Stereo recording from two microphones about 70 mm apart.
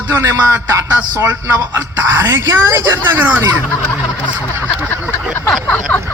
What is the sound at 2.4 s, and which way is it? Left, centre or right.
Speech, right.